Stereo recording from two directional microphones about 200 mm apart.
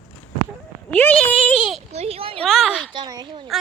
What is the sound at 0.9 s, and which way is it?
Speech, 10° left (ahead or behind).